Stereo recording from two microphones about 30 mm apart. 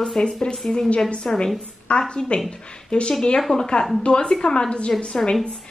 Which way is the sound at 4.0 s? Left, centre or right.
Left.